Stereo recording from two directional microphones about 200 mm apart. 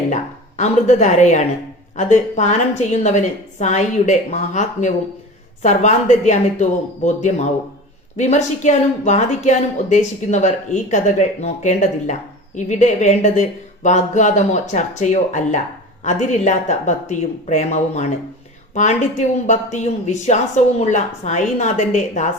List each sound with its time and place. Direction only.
0.1 s a woman's voice: 35° left (ahead or behind)